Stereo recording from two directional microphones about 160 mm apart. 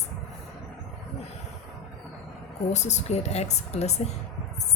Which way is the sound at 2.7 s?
45° left (ahead or behind).